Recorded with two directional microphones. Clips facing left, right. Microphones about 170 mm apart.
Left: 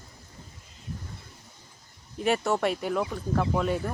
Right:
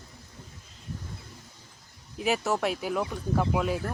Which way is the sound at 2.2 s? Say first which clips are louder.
Left 2 dB; centre (ahead or behind).